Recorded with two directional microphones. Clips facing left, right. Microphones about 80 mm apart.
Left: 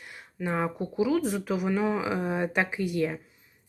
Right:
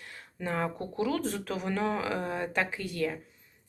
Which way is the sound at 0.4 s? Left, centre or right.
Centre.